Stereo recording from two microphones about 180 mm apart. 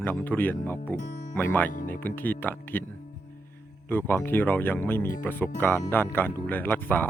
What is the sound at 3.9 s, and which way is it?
Speech, 10° left (ahead or behind).